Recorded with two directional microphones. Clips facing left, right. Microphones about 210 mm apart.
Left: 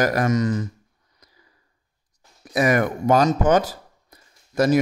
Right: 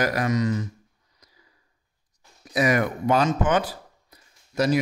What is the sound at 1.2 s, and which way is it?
Sniff, 55° left (ahead or behind).